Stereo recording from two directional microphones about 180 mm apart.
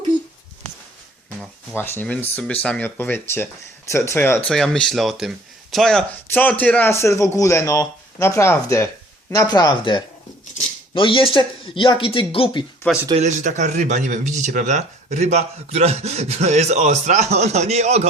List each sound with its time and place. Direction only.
1.7 s a man's voice: 10° left (ahead or behind)
4.4 s a man's voice: 5° left (ahead or behind); by 12.6 s 30° left (ahead or behind)
13.1 s speech: 40° right (ahead or behind)